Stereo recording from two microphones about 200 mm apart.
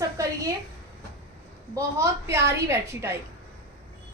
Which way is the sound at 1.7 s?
15° right (ahead or behind).